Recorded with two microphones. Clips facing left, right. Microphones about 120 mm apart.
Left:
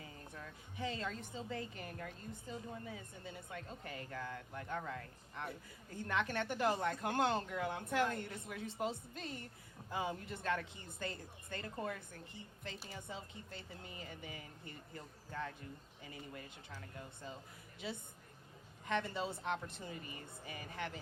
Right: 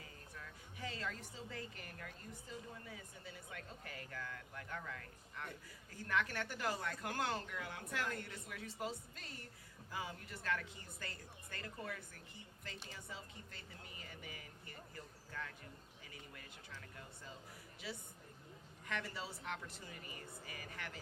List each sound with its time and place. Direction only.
0.3 s a woman's voice: 25° left (ahead or behind)
17.7 s a woman's voice: 25° left (ahead or behind)